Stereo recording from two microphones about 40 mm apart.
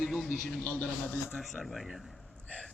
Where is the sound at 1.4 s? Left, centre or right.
Centre.